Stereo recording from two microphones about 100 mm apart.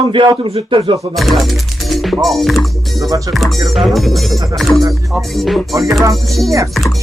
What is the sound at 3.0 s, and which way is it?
Speech, 35° right (ahead or behind).